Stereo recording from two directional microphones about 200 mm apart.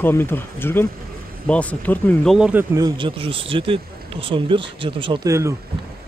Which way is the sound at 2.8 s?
20° right (ahead or behind).